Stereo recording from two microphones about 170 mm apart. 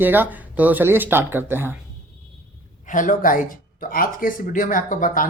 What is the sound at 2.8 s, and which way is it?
Speech, 50° left (ahead or behind).